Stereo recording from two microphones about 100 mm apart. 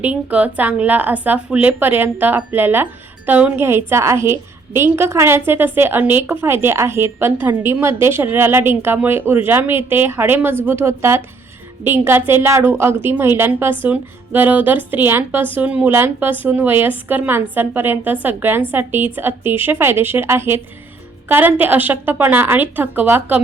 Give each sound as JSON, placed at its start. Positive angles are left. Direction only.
{"t": 0.0, "sound": "speech", "side_deg": -15}